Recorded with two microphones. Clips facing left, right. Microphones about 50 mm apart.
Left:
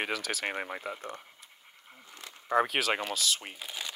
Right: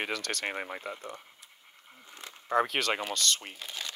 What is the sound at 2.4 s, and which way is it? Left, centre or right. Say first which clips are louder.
Speech: left 1 dB; centre.